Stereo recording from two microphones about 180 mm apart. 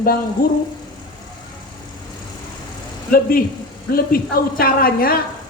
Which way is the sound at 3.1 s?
55° left (ahead or behind).